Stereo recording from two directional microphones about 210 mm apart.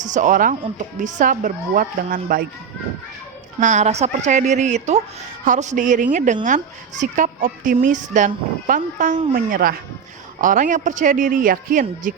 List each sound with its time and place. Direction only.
0.0 s a woman's voice: 35° right (ahead or behind)
3.6 s a woman's voice: 35° right (ahead or behind)